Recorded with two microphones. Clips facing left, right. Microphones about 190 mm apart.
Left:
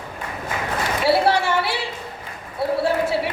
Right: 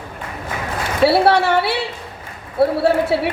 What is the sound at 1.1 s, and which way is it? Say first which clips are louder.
Speech: right 2 dB; 65° right (ahead or behind).